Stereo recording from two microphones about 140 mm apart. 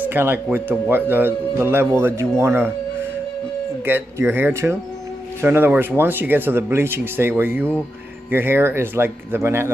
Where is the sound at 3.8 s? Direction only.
15° right (ahead or behind).